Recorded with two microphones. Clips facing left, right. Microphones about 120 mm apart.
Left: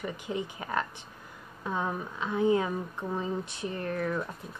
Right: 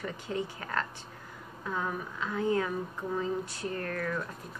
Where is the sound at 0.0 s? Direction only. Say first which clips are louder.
Left 1 dB; 15° left (ahead or behind).